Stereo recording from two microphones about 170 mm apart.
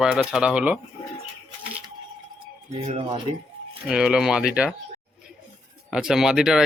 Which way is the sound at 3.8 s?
5° right (ahead or behind).